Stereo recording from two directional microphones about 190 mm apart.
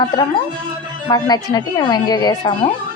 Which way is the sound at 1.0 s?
20° left (ahead or behind).